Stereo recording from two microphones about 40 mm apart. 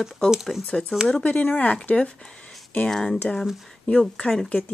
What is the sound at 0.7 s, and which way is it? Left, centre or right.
Speech, centre.